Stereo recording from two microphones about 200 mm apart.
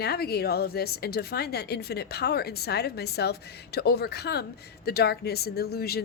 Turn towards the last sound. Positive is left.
turn(degrees=50)  # may be behind; listen again after turning